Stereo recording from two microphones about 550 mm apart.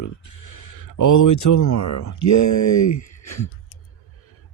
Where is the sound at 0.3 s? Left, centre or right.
Left.